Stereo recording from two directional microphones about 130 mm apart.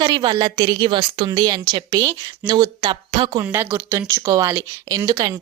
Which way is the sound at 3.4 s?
20° right (ahead or behind).